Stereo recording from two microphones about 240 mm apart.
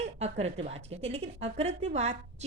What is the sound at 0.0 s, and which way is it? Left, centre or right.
Speech, right.